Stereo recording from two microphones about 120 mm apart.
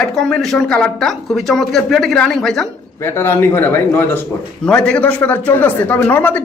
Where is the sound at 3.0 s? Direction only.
20° left (ahead or behind).